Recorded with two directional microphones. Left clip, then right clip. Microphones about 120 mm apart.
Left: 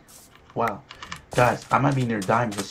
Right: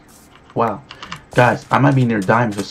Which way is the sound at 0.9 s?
25° left (ahead or behind).